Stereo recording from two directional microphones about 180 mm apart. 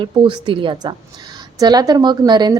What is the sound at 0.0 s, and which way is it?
A woman's voice, 25° right (ahead or behind).